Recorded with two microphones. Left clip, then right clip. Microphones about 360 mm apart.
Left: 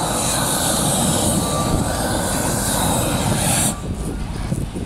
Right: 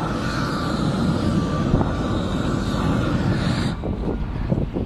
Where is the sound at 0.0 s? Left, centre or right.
Centre.